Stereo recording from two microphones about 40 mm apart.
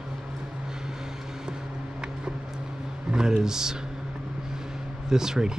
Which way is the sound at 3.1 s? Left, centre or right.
Centre.